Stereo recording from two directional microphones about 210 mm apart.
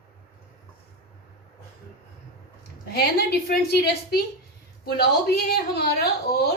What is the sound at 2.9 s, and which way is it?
A woman's voice, 50° left (ahead or behind).